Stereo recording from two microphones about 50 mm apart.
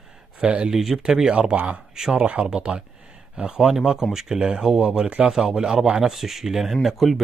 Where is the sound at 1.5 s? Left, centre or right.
Right.